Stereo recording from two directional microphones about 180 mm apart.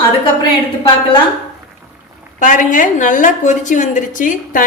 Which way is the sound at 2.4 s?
45° left (ahead or behind).